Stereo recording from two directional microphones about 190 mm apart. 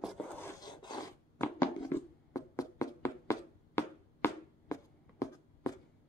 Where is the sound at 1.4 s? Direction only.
10° left (ahead or behind).